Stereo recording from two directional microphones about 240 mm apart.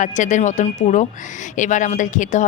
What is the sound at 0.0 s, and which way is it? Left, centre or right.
A woman's voice, left.